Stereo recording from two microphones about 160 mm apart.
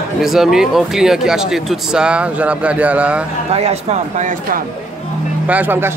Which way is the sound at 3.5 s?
40° right (ahead or behind).